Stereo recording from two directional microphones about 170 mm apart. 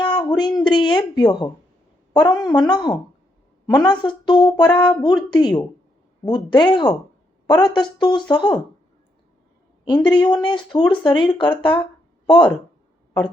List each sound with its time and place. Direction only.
0.0 s speech: 25° left (ahead or behind)
9.8 s speech: 25° left (ahead or behind)